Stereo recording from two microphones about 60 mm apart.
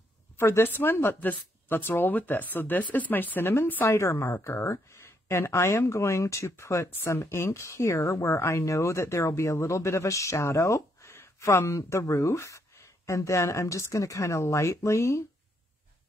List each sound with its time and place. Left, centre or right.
0.4 s speech: left
0.7 s speech: left
3.8 s speech: left